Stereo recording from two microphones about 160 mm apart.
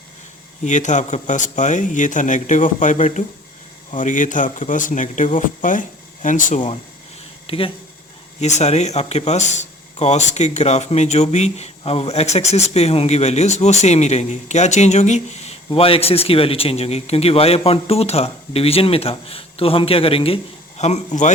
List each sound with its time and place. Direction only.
0.6 s speech: 50° left (ahead or behind)
7.4 s a sound: 35° left (ahead or behind)
8.4 s speech: 45° left (ahead or behind)